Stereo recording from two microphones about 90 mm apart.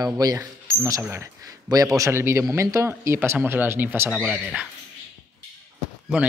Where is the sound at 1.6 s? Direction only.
40° right (ahead or behind); by 4.6 s 15° right (ahead or behind).